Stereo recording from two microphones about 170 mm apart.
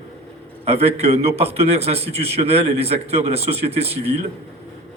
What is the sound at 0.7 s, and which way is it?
A man's voice, 35° right (ahead or behind).